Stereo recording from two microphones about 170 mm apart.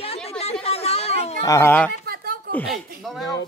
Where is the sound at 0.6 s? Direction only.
35° left (ahead or behind).